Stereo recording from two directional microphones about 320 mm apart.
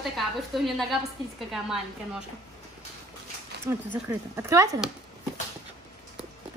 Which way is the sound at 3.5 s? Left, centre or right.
Right.